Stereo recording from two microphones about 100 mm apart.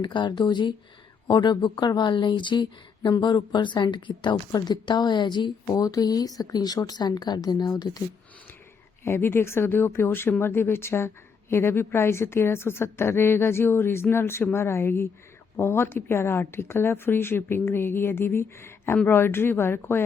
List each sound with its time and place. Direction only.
0.0 s a woman's voice: 50° left (ahead or behind)
5.7 s a woman's voice: 35° left (ahead or behind)
9.0 s speech: 25° left (ahead or behind)